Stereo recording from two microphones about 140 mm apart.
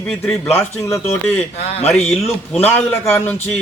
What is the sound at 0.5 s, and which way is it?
Speech, 20° left (ahead or behind).